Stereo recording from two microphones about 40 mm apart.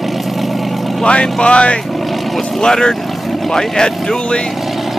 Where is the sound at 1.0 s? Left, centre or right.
Left.